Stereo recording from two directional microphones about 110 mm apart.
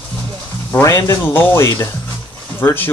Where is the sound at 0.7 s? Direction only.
25° left (ahead or behind).